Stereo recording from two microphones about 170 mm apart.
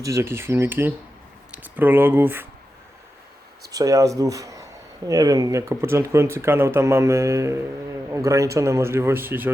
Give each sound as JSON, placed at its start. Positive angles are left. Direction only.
{"t": 0.0, "sound": "speech", "side_deg": -15}
{"t": 3.7, "sound": "speech", "side_deg": -20}